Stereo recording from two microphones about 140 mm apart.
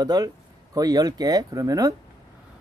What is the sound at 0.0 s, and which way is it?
Speech, 30° right (ahead or behind).